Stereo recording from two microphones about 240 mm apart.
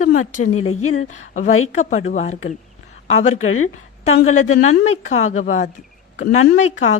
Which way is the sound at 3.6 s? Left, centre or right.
Left.